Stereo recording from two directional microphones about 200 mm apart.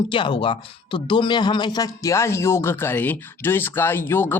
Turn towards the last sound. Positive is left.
turn(degrees=10)  # may be behind; listen again after turning